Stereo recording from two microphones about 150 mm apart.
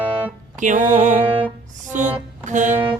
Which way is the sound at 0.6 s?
55° right (ahead or behind).